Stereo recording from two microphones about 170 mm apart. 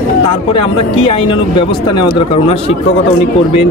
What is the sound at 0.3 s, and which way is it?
Speech, 30° left (ahead or behind).